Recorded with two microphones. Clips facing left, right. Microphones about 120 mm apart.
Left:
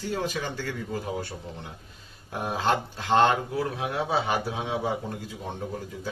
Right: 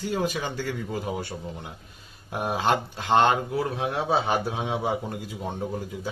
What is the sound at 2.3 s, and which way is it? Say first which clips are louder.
Speech: right 2 dB; 20° right (ahead or behind).